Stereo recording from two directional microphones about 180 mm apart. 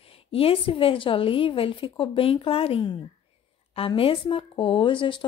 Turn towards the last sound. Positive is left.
turn(degrees=30)  # may be behind; listen again after turning